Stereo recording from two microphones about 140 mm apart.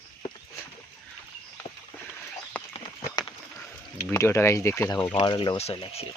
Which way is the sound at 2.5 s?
10° left (ahead or behind).